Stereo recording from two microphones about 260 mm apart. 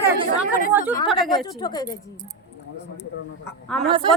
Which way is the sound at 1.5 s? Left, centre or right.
Centre.